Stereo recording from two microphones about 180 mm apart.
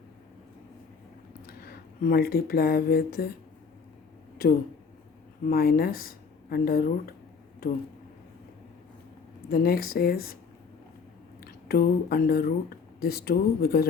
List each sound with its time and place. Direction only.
1.5 s speech: 55° left (ahead or behind)
5.5 s speech: 55° left (ahead or behind)
9.5 s speech: 55° left (ahead or behind)
11.4 s speech: 55° left (ahead or behind)